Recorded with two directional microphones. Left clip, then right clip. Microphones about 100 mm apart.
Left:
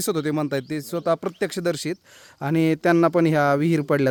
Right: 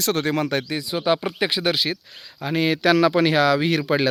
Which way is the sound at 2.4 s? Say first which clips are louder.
Right 1 dB; 35° left (ahead or behind).